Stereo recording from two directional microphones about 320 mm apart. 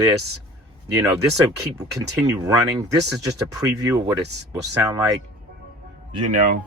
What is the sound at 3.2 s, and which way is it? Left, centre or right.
Speech, centre.